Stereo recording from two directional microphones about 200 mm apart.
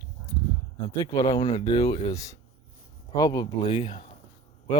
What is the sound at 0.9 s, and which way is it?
Speech, 15° left (ahead or behind).